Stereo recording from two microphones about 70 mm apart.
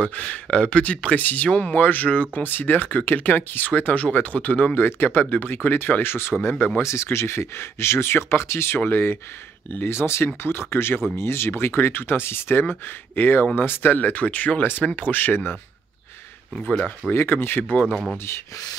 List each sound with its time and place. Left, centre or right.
0.0 s speech: centre
17.1 s speech: left